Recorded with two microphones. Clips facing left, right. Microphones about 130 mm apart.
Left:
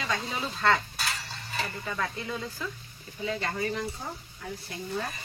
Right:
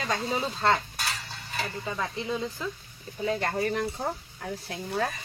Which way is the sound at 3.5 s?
60° right (ahead or behind).